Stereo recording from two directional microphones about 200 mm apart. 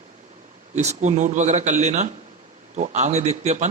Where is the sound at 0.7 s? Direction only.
35° right (ahead or behind).